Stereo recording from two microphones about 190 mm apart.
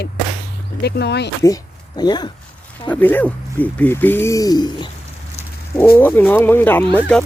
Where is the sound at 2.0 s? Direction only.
20° left (ahead or behind).